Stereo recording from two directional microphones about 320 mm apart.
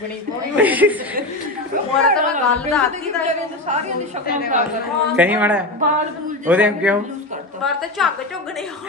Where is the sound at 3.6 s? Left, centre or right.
Right.